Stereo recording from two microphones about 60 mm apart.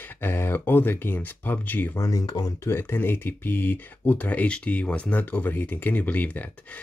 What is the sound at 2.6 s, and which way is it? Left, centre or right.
Speech, left.